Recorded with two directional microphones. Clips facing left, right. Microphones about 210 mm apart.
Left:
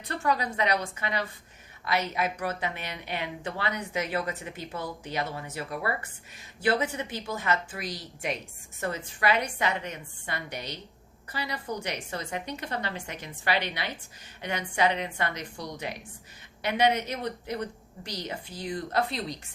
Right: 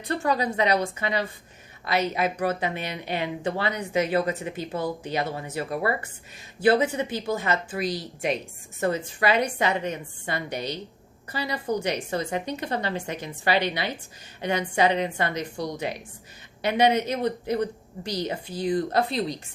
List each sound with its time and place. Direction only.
0.2 s speech: 30° right (ahead or behind)